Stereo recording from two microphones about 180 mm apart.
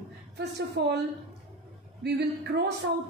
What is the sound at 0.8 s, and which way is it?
Speech, 65° right (ahead or behind).